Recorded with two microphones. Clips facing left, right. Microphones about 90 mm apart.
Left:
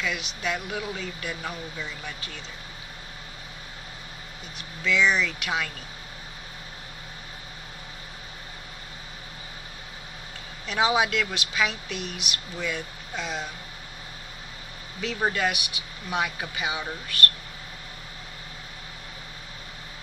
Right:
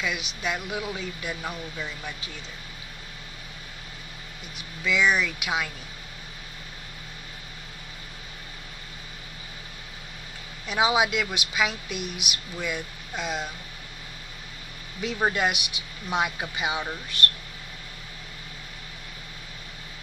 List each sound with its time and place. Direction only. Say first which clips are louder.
0.0 s speech: even; 15° right (ahead or behind)
4.6 s speech: left 1 dB; 10° right (ahead or behind)
10.7 s speech: even; 10° right (ahead or behind)
15.0 s speech: right 1 dB; 15° right (ahead or behind)